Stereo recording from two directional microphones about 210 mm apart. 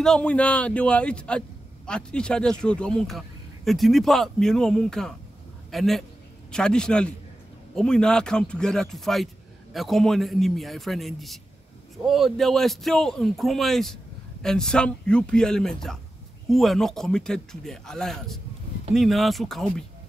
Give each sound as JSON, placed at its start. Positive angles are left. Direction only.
{"t": 0.0, "sound": "speech", "side_deg": 5}